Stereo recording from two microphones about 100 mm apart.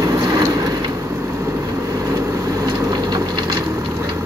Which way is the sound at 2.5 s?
40° right (ahead or behind).